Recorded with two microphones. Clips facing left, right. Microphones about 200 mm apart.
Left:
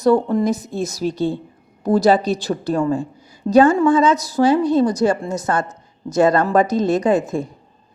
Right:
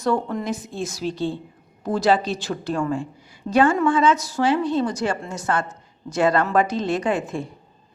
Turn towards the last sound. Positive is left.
turn(degrees=40)  # may be behind; listen again after turning